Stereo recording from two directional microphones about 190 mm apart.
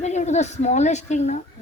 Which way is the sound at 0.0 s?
35° left (ahead or behind).